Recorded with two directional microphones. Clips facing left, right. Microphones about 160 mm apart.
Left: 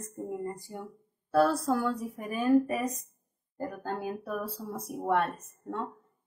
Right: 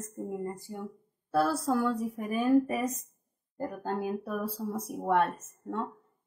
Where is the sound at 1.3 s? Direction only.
5° right (ahead or behind).